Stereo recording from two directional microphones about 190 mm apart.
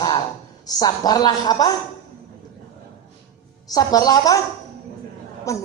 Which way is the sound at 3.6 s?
20° left (ahead or behind).